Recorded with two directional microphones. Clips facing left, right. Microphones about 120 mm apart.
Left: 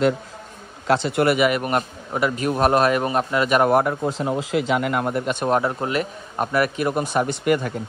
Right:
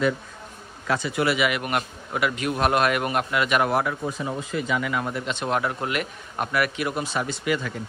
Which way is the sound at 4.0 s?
70° left (ahead or behind).